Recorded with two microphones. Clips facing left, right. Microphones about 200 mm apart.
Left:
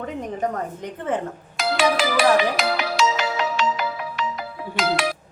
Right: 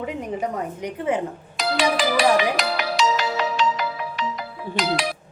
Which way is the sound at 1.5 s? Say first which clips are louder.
Left 1 dB; 5° left (ahead or behind).